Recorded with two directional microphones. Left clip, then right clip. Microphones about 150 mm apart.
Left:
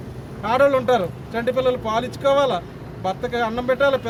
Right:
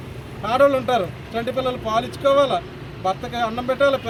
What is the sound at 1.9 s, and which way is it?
Speech, 30° left (ahead or behind).